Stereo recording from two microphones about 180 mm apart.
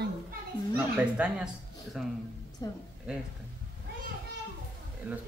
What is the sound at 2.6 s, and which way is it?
Speech, 20° left (ahead or behind).